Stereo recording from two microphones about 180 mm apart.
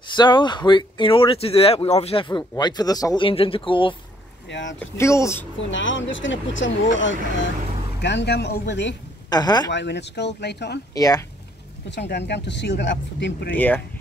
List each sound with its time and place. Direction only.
0.1 s speech: 25° left (ahead or behind)
4.5 s speech: 90° left
4.7 s speech: 15° left (ahead or behind)
5.6 s speech: 90° left
8.0 s speech: 75° left (ahead or behind)
9.3 s speech: 20° left (ahead or behind)
9.7 s speech: 75° left (ahead or behind)
11.0 s speech: 20° left (ahead or behind)
11.9 s speech: 70° left (ahead or behind)
13.6 s speech: 10° left (ahead or behind)